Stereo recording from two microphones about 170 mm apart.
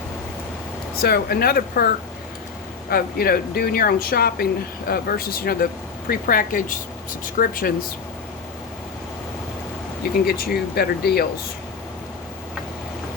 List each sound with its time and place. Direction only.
1.0 s speech: 65° left (ahead or behind)
2.9 s speech: 65° left (ahead or behind)
10.0 s speech: 60° left (ahead or behind)